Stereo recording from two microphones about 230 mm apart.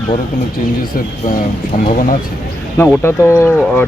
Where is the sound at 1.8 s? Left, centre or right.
Left.